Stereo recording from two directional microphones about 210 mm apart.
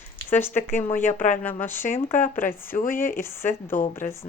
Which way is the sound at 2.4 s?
10° left (ahead or behind).